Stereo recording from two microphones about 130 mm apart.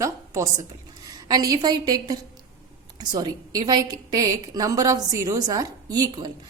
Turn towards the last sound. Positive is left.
turn(degrees=-30)  # may be behind; listen again after turning